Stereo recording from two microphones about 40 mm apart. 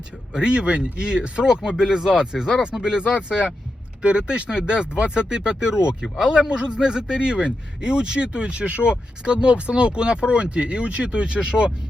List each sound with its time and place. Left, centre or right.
0.3 s speech: right